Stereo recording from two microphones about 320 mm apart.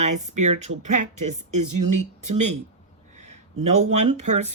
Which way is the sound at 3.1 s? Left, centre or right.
Right.